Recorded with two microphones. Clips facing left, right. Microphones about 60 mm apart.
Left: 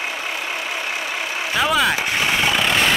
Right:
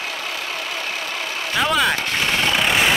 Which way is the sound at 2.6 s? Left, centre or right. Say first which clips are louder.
Even; centre.